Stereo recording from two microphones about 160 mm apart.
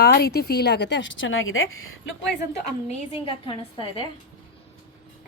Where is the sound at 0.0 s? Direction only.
80° left.